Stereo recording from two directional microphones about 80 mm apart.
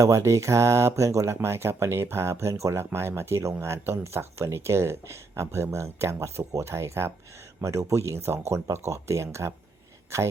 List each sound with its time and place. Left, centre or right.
0.0 s speech: right